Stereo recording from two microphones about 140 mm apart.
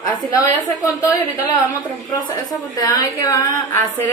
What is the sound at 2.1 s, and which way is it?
A woman's voice, 30° left (ahead or behind).